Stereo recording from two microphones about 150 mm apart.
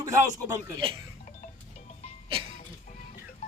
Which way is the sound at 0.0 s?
20° right (ahead or behind).